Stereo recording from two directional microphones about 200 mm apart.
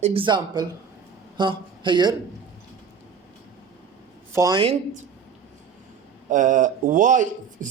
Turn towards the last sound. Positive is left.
turn(degrees=-40)  # may be behind; listen again after turning